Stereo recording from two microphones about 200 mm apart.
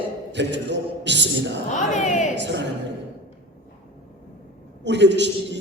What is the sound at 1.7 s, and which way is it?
Speech, 40° left (ahead or behind).